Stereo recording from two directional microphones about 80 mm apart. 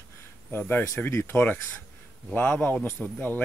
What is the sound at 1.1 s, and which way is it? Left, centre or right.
Speech, left.